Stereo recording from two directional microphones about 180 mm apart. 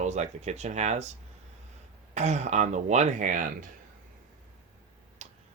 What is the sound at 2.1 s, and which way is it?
Speech, 40° right (ahead or behind).